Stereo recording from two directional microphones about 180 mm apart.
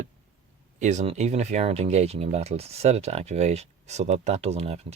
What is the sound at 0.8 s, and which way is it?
Speech, 40° right (ahead or behind).